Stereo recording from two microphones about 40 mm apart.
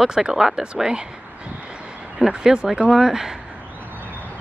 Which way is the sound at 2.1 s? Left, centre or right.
Centre.